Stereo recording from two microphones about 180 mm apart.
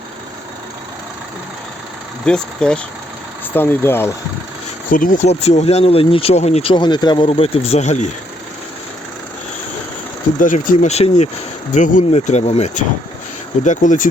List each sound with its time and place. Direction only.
2.2 s speech: 5° left (ahead or behind)
4.9 s speech: 50° left (ahead or behind)
10.4 s speech: 45° left (ahead or behind)